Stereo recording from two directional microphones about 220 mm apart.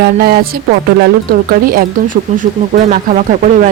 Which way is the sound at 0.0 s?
45° right (ahead or behind).